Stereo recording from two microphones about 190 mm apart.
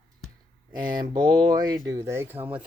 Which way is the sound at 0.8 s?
25° right (ahead or behind).